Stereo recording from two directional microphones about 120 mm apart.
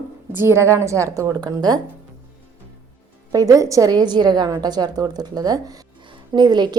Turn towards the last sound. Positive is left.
turn(degrees=-35)  # may be behind; listen again after turning